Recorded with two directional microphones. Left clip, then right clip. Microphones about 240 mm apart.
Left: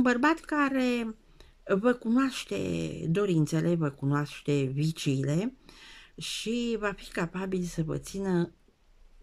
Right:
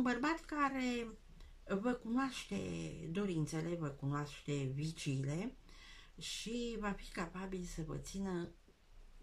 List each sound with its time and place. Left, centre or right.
0.0 s speech: left